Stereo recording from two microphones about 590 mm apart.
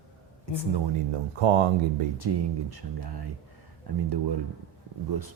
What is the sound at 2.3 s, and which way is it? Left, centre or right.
Speech, right.